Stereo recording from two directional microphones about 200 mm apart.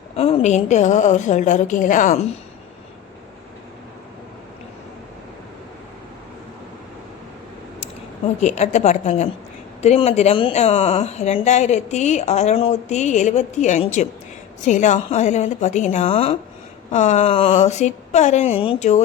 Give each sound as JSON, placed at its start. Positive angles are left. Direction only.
{"t": 0.2, "sound": "speech", "side_deg": 35}
{"t": 8.4, "sound": "speech", "side_deg": 35}